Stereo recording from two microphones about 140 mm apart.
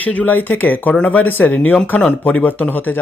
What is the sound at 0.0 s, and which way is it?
Speech, 10° left (ahead or behind).